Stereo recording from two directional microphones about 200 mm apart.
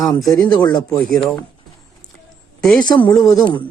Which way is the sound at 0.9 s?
5° left (ahead or behind).